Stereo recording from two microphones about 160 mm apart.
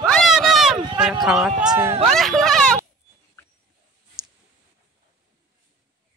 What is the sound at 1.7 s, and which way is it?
Speech, 25° right (ahead or behind).